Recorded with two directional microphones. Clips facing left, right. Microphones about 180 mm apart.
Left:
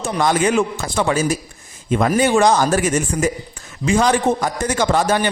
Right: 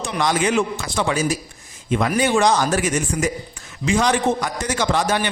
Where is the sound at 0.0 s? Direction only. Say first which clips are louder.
Left 3 dB; 50° left (ahead or behind).